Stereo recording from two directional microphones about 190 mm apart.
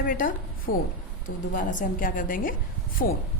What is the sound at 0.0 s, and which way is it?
A woman's voice, 45° left (ahead or behind).